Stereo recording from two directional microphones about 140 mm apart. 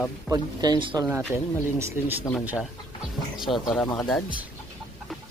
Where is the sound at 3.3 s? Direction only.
Centre (ahead or behind).